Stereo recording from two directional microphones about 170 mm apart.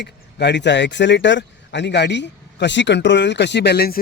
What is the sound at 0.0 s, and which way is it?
Speech, 90° left.